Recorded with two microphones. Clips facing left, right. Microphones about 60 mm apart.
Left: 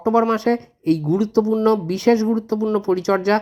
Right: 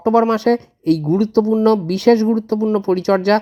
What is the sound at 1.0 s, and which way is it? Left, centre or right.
Speech, right.